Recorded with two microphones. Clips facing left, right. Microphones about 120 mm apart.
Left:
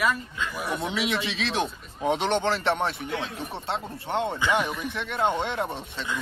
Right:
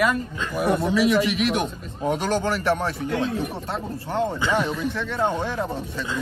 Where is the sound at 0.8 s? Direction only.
20° left (ahead or behind).